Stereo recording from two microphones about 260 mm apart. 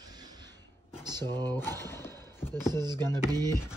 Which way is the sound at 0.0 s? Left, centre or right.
Centre.